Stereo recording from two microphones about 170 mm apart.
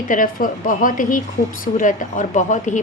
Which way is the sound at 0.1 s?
55° left (ahead or behind).